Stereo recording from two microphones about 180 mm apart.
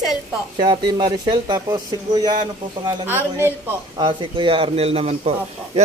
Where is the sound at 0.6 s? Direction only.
25° right (ahead or behind).